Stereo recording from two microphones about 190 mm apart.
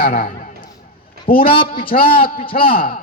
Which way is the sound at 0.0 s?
50° left (ahead or behind).